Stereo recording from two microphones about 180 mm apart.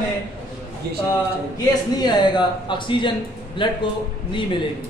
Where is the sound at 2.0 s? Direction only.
25° left (ahead or behind).